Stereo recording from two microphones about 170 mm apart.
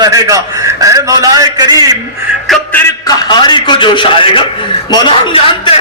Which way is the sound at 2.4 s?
10° left (ahead or behind).